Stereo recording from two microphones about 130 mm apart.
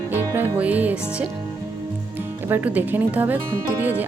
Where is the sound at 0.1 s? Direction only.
15° right (ahead or behind).